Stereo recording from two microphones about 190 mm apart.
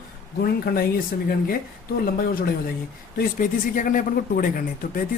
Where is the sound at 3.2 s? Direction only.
45° left (ahead or behind).